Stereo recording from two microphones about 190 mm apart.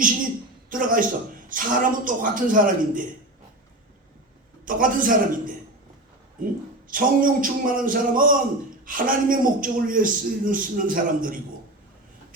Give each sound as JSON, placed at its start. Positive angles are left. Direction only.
{"t": 0.7, "sound": "a man's voice", "side_deg": -45}
{"t": 4.6, "sound": "a man's voice", "side_deg": -45}